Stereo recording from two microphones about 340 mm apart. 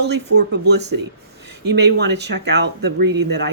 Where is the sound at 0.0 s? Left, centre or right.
Right.